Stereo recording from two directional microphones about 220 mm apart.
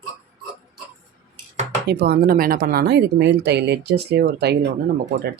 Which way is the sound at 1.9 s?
45° right (ahead or behind).